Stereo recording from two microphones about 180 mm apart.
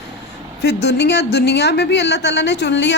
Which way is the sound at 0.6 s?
70° left (ahead or behind).